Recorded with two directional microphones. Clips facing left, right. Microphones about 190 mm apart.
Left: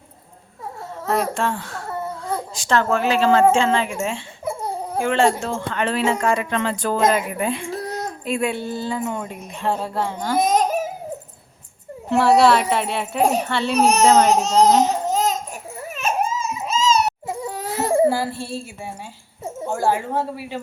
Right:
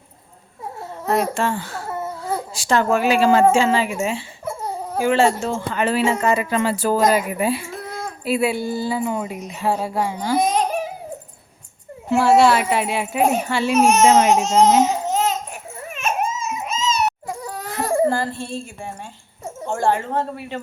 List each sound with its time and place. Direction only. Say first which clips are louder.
1.0 s speech: right 1 dB; centre (ahead or behind)
7.7 s a sound: left 3 dB; 40° left (ahead or behind)
8.2 s speech: right 4 dB; 5° right (ahead or behind)
10.3 s babbling: left 1 dB; 45° left (ahead or behind)
12.0 s speech: even; centre (ahead or behind)
13.7 s a child's voice: right 2 dB; 35° left (ahead or behind)
14.1 s speech: even; 10° right (ahead or behind)
15.1 s babbling: even; 40° left (ahead or behind)
16.0 s baby cry: left 1 dB; 35° left (ahead or behind)
17.8 s child singing: left 1 dB; 15° left (ahead or behind)
19.6 s a woman's voice: right 1 dB; 5° left (ahead or behind)